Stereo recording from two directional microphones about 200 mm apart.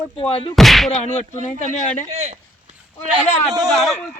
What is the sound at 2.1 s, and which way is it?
Speech, 35° right (ahead or behind).